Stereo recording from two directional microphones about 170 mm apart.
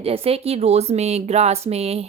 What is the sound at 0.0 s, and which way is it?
Speech, 35° right (ahead or behind).